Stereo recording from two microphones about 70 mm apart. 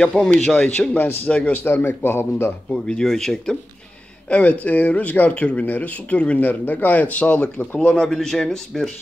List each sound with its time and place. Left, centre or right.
0.0 s a man's voice: centre
0.9 s speech: left
2.7 s a man's voice: centre
4.3 s speech: centre